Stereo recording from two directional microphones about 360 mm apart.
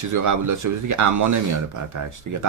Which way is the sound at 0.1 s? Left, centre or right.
Right.